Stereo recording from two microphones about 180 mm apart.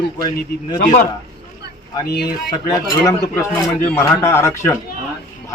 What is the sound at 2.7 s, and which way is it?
A man's voice, 20° left (ahead or behind).